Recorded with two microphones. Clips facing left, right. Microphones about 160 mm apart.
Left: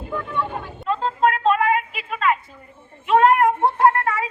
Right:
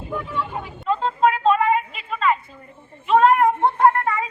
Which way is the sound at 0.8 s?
Centre (ahead or behind).